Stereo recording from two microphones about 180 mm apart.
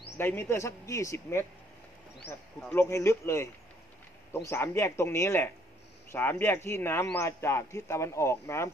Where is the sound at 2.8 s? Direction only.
15° left (ahead or behind).